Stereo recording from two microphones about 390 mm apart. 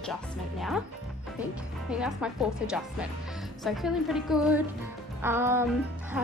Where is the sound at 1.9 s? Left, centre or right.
Centre.